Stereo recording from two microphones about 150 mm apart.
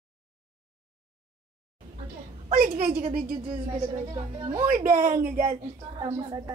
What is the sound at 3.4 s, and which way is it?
A woman's voice, 25° right (ahead or behind).